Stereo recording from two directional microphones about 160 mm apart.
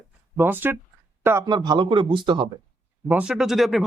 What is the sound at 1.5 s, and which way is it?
A man's voice, 25° right (ahead or behind).